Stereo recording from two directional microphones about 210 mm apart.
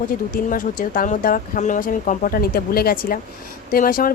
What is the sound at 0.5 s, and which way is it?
A woman's voice, 40° left (ahead or behind).